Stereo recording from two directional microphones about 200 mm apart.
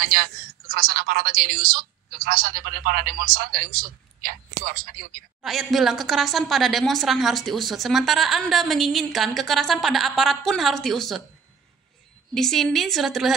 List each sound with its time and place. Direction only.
0.0 s a woman's voice: 45° right (ahead or behind)
5.4 s a woman's voice: centre (ahead or behind)
12.4 s a woman's voice: centre (ahead or behind)